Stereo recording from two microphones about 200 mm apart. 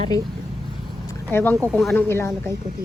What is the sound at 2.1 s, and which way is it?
Speech, 15° left (ahead or behind).